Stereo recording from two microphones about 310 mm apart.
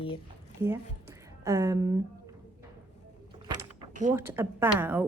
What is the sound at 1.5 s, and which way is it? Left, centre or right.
Speech, centre.